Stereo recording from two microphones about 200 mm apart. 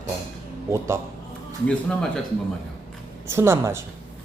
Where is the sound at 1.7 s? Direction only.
5° left (ahead or behind).